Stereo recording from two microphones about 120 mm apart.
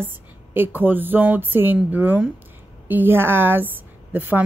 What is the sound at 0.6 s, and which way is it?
A woman's voice, 15° right (ahead or behind).